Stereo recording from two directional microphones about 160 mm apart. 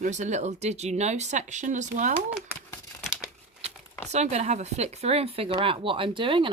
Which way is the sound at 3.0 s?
5° right (ahead or behind).